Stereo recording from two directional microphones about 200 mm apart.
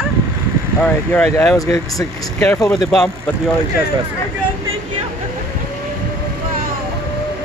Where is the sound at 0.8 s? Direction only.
10° left (ahead or behind).